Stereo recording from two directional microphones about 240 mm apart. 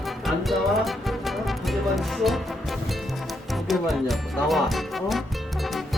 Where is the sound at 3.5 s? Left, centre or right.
Centre.